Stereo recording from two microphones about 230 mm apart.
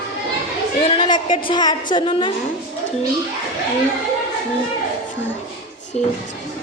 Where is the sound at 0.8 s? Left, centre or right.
Left.